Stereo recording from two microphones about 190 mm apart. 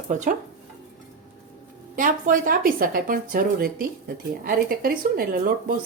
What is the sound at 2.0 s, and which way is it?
Speech, 45° right (ahead or behind).